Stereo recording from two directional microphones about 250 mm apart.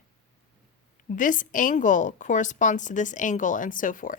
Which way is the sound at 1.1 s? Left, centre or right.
Left.